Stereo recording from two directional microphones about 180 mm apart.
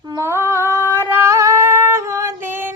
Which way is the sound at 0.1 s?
15° right (ahead or behind).